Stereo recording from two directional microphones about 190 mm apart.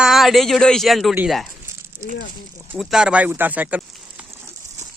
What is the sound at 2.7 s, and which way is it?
Speech, 5° right (ahead or behind).